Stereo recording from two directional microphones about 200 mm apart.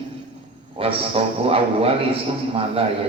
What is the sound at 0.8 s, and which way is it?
A man's voice, 30° right (ahead or behind).